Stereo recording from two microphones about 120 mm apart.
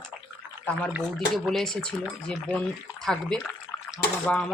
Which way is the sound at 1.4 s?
5° left (ahead or behind).